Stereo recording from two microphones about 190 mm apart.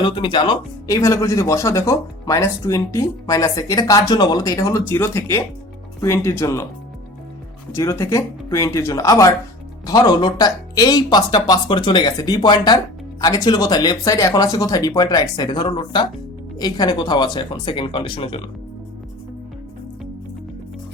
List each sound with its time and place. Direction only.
0.0 s speech: 25° left (ahead or behind)
7.7 s speech: 15° left (ahead or behind)